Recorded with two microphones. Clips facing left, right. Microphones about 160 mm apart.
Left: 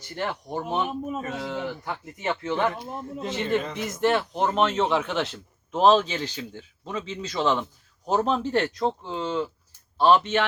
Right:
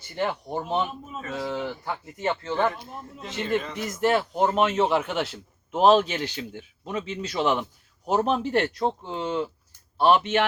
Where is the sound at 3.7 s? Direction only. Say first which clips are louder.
Even; 5° right (ahead or behind).